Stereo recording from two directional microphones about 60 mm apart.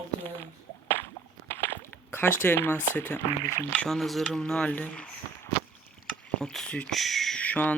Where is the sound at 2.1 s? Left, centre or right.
Left.